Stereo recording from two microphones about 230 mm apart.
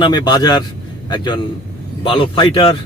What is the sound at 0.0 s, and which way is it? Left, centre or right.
A man's voice, centre.